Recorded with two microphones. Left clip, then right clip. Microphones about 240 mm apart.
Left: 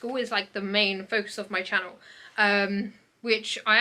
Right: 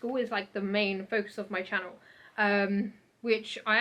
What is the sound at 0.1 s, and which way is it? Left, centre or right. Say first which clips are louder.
Speech: left 4 dB; centre.